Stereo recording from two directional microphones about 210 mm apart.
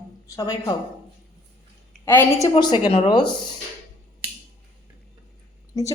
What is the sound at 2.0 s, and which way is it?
Speech, 10° left (ahead or behind).